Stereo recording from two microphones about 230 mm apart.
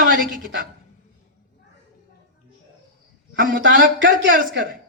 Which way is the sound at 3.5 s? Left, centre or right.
Right.